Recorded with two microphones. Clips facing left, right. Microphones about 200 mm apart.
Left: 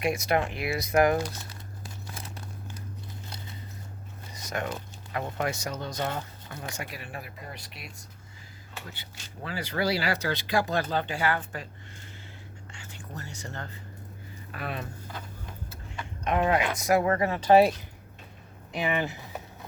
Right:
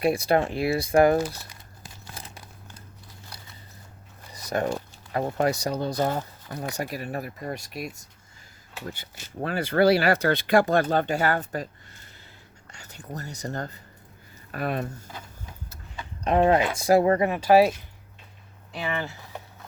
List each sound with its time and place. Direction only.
0.0 s speech: 30° right (ahead or behind)
4.4 s speech: 35° right (ahead or behind)
8.9 s speech: 50° right (ahead or behind)
12.7 s speech: 40° right (ahead or behind)
16.2 s speech: 35° right (ahead or behind)
17.2 s speech: 10° right (ahead or behind)
18.7 s speech: 15° left (ahead or behind)